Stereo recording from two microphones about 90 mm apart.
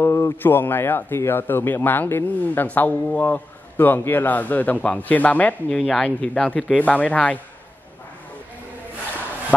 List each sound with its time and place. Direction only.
0.0 s a man's voice: 25° left (ahead or behind)